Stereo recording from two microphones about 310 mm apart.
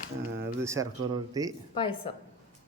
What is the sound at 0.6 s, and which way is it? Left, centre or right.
Speech, centre.